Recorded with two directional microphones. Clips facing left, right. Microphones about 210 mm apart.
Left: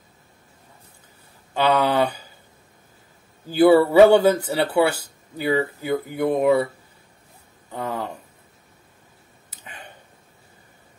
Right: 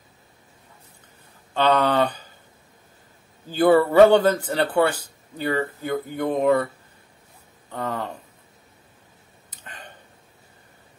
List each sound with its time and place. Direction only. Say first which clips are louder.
1.5 s speech: even; 10° left (ahead or behind)
3.4 s speech: left 3 dB; 10° left (ahead or behind)
7.7 s speech: even; 10° left (ahead or behind)
9.5 s a sound: left 1 dB; 10° left (ahead or behind)